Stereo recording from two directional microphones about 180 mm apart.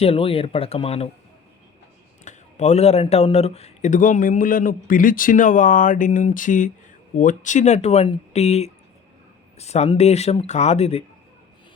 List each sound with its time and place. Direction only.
0.0 s speech: 30° left (ahead or behind)
2.2 s speech: 40° left (ahead or behind)